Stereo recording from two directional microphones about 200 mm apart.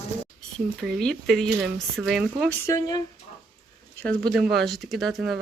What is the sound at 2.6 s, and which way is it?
Speech, 15° left (ahead or behind).